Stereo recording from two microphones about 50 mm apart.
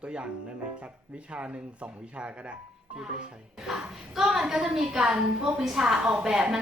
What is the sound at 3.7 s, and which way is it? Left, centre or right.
A woman's voice, centre.